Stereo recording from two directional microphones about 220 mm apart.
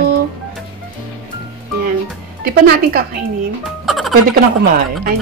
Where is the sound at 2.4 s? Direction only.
45° right (ahead or behind).